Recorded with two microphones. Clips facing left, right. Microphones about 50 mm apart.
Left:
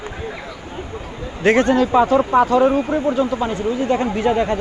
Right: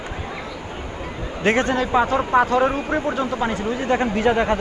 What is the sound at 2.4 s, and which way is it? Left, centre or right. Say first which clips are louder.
Speech: left 4 dB; right.